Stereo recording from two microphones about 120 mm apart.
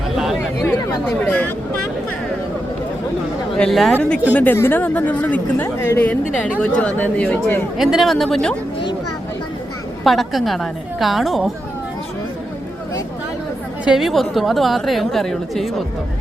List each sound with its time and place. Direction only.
1.2 s speech: 15° left (ahead or behind)
3.6 s a woman's voice: centre (ahead or behind)
4.4 s speech: 15° left (ahead or behind)
7.8 s a woman's voice: centre (ahead or behind)
10.0 s a woman's voice: centre (ahead or behind)
13.8 s a woman's voice: 5° right (ahead or behind)